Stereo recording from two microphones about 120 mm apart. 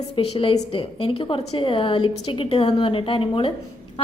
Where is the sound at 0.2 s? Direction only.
50° left (ahead or behind).